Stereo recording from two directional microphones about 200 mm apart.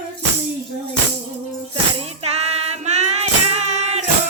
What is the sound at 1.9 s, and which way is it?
Music, 30° right (ahead or behind).